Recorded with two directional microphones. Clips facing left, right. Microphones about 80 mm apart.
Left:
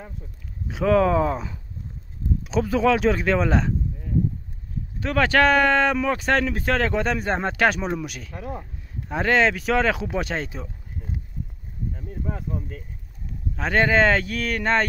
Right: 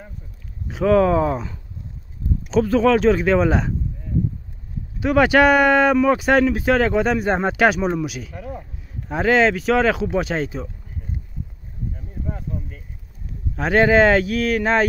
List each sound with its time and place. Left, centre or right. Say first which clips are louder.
0.7 s speech: right 3 dB; centre
5.0 s speech: right 4 dB; centre
8.4 s speech: left 4 dB; left
9.0 s speech: right 3 dB; centre
12.1 s a sound: left 1 dB; left
13.6 s speech: right 5 dB; centre